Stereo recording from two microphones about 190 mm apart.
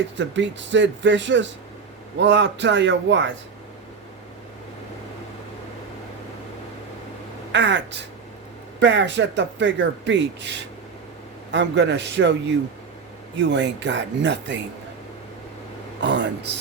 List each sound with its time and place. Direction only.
0.2 s speech: 70° right (ahead or behind)
7.5 s speech: 70° right (ahead or behind)
16.0 s a sound: 70° right (ahead or behind)